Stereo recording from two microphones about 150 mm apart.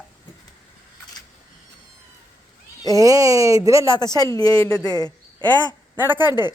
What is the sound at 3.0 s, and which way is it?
Speech, 20° right (ahead or behind).